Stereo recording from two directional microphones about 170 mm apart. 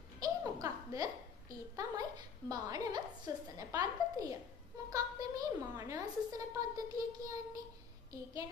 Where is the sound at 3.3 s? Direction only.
20° right (ahead or behind).